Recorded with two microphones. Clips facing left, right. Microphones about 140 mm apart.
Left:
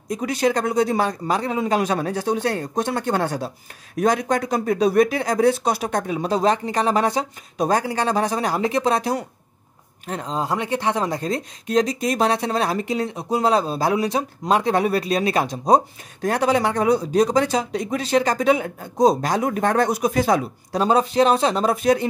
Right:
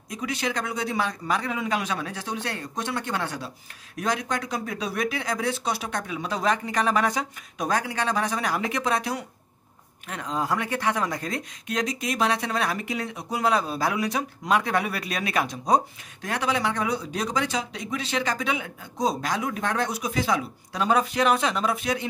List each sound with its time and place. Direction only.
0.1 s speech: 40° left (ahead or behind)